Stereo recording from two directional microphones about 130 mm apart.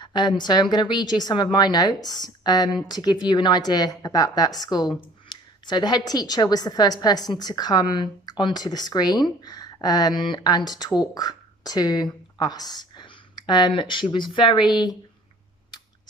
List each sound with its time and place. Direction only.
0.0 s a woman's voice: 35° left (ahead or behind)